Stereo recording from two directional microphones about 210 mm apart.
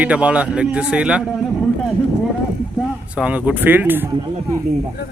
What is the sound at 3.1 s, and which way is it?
Speech, 5° right (ahead or behind).